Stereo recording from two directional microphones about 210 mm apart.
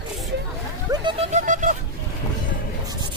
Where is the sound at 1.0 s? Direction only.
30° right (ahead or behind).